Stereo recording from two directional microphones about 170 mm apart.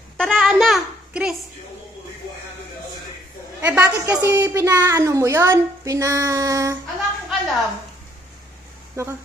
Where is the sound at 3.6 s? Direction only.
10° right (ahead or behind).